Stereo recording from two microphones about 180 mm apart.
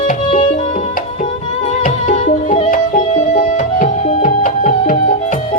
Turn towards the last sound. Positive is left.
turn(degrees=45)  # may be behind; listen again after turning